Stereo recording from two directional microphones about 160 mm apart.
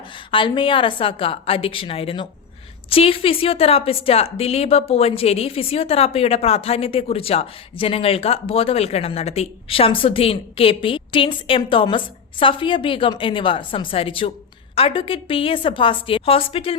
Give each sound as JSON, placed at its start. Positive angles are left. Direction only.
{"t": 0.3, "sound": "a woman's voice", "side_deg": 30}